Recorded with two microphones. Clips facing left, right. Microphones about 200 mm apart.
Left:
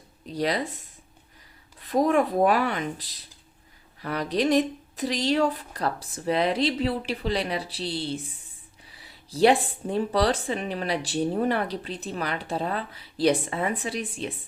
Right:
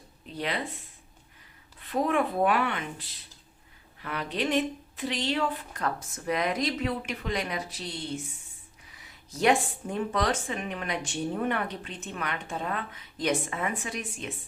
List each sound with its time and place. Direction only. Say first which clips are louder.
0.3 s speech: left 6 dB; 40° left (ahead or behind)
1.9 s speech: left 5 dB; 40° left (ahead or behind)